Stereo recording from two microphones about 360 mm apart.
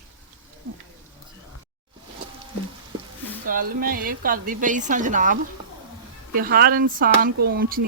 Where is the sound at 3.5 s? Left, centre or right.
Right.